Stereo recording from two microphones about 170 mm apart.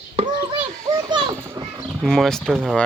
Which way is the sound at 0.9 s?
25° right (ahead or behind).